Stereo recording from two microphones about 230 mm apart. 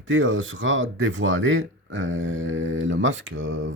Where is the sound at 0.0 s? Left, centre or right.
Right.